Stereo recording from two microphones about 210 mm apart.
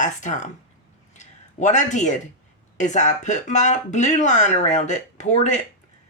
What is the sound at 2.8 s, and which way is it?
Speech, 35° left (ahead or behind).